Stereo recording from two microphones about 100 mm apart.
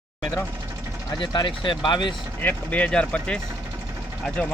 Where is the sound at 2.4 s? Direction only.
15° left (ahead or behind).